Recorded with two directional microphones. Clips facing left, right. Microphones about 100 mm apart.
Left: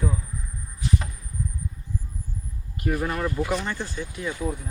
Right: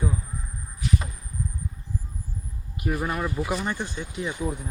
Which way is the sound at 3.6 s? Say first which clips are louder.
Right 1 dB; 20° right (ahead or behind).